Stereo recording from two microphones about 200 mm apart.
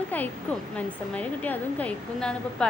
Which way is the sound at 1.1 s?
5° left (ahead or behind).